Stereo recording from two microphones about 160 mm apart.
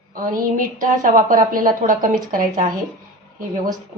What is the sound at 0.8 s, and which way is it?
A woman's voice, 55° right (ahead or behind).